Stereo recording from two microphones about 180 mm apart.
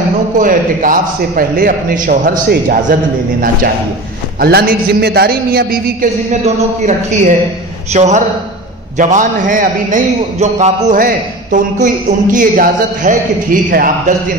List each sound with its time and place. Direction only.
0.4 s a man's voice: 50° right (ahead or behind)
6.4 s a man's voice: 40° right (ahead or behind)